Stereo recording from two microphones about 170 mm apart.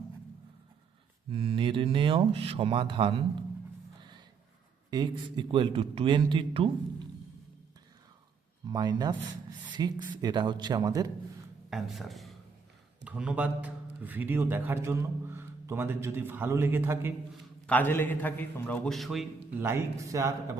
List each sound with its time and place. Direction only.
1.3 s speech: 30° right (ahead or behind)
4.9 s a man's voice: 25° right (ahead or behind)
8.6 s a man's voice: 25° right (ahead or behind)
11.7 s a man's voice: centre (ahead or behind)
17.7 s a man's voice: 10° left (ahead or behind)
19.5 s a man's voice: 15° right (ahead or behind)